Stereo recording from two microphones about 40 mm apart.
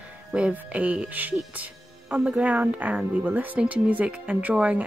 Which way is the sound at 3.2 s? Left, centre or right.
Right.